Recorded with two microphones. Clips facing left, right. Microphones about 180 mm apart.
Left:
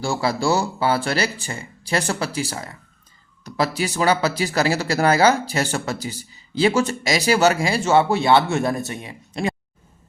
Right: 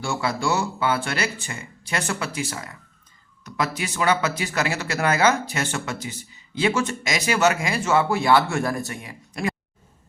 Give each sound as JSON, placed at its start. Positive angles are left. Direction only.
{"t": 0.0, "sound": "speech", "side_deg": 35}